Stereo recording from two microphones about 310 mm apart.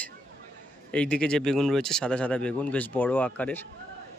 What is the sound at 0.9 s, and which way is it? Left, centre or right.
Speech, centre.